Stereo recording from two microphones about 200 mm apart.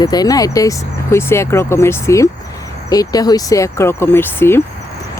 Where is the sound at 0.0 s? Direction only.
20° left (ahead or behind).